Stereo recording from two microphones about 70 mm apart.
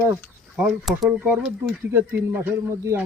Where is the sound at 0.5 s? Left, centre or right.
Centre.